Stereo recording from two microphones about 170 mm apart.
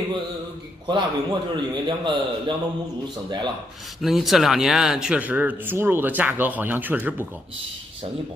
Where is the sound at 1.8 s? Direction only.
30° right (ahead or behind).